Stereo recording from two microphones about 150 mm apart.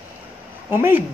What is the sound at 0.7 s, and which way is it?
Speech, 15° right (ahead or behind).